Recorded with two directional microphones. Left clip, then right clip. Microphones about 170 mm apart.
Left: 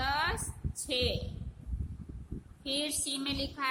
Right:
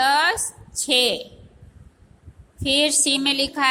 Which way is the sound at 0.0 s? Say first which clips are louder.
Right 14 dB; 30° right (ahead or behind).